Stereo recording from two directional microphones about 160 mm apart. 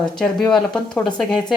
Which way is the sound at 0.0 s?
5° left (ahead or behind).